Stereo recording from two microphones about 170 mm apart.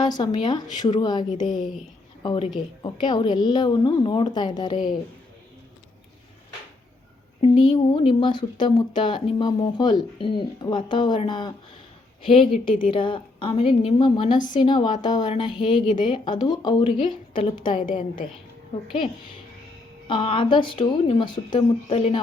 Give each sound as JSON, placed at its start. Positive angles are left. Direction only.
{"t": 0.0, "sound": "speech", "side_deg": 25}
{"t": 1.3, "sound": "a woman's voice", "side_deg": 50}
{"t": 2.2, "sound": "speech", "side_deg": 30}
{"t": 7.4, "sound": "speech", "side_deg": 30}
{"t": 17.4, "sound": "a woman's voice", "side_deg": 50}
{"t": 20.1, "sound": "speech", "side_deg": 30}